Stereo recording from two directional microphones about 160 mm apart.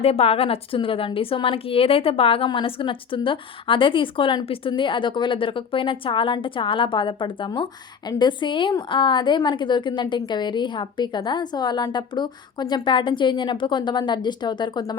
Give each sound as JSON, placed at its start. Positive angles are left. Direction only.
{"t": 0.0, "sound": "a woman's voice", "side_deg": 40}